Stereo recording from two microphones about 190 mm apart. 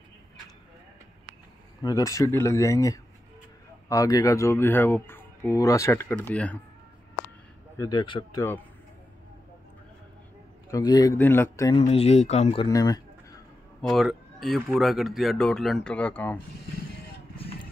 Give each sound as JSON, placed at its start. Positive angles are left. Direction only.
{"t": 1.8, "sound": "speech", "side_deg": 20}
{"t": 7.7, "sound": "speech", "side_deg": 20}
{"t": 10.7, "sound": "speech", "side_deg": 20}
{"t": 11.8, "sound": "speech", "side_deg": 30}
{"t": 12.6, "sound": "a sound", "side_deg": 20}
{"t": 13.7, "sound": "speech", "side_deg": 0}